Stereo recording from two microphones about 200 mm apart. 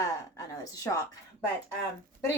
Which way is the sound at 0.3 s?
15° left (ahead or behind).